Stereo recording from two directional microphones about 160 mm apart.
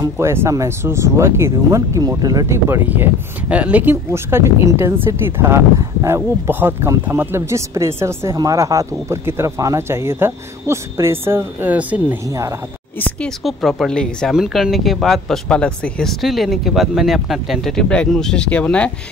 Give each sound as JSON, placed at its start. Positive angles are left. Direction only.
{"t": 0.0, "sound": "speech", "side_deg": -15}
{"t": 13.0, "sound": "speech", "side_deg": 5}